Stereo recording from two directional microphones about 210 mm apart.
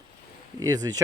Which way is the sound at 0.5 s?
20° right (ahead or behind).